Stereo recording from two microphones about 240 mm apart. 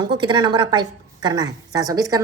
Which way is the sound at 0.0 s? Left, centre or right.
Centre.